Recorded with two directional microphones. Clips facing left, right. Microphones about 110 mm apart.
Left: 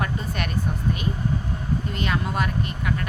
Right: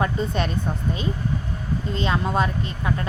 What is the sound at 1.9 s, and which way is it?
Speech, 25° right (ahead or behind).